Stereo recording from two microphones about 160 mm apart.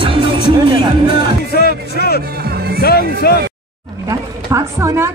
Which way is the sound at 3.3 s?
75° left (ahead or behind).